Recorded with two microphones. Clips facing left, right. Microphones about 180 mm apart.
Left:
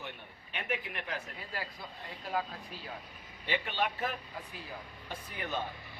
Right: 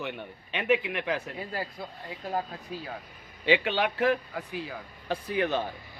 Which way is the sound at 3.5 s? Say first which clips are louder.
Right 9 dB; 90° right.